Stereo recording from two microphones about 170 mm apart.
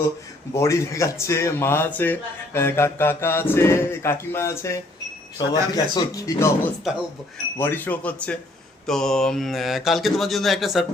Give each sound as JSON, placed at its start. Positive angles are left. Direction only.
{"t": 0.5, "sound": "speech", "side_deg": 15}
{"t": 7.6, "sound": "speech", "side_deg": 10}